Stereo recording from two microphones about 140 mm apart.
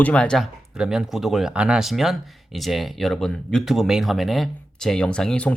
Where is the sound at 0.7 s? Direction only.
5° right (ahead or behind).